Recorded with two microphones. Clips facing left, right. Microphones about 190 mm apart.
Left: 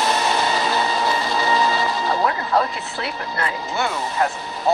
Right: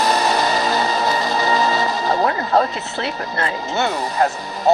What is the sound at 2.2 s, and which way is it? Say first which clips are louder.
Speech: right 3 dB; 30° right (ahead or behind).